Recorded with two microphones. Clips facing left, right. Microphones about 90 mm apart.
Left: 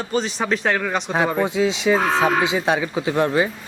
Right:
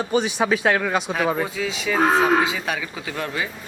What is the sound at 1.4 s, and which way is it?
Speech, 25° left (ahead or behind).